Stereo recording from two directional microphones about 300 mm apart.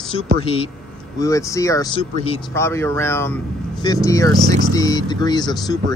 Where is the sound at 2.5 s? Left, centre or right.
Centre.